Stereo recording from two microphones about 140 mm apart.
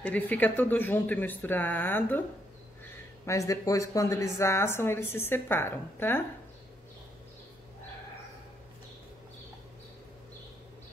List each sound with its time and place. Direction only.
0.0 s speech: 10° left (ahead or behind)
3.3 s speech: 20° left (ahead or behind)